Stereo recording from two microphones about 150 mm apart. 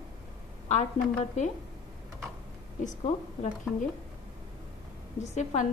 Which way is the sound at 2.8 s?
50° left (ahead or behind).